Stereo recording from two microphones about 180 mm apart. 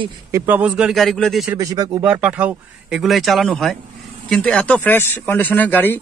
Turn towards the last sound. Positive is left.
turn(degrees=10)  # may be behind; listen again after turning